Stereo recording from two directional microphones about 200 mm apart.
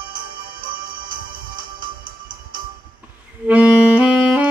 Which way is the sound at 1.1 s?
45° right (ahead or behind).